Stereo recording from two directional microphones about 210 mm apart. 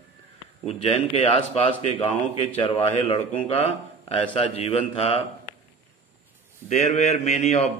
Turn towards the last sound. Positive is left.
turn(degrees=30)  # may be behind; listen again after turning